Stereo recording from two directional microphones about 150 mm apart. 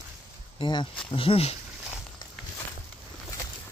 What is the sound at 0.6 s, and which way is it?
Speech, 30° left (ahead or behind).